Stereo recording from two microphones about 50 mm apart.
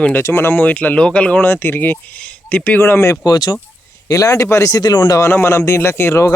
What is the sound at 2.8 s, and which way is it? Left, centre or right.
Speech, left.